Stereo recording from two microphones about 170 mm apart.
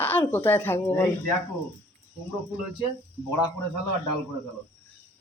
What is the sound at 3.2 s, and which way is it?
Speech, 25° left (ahead or behind).